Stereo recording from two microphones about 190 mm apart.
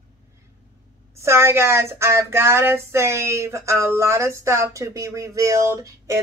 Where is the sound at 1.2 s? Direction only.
15° right (ahead or behind).